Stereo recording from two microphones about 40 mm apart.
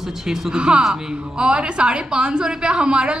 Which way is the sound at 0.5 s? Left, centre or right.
Right.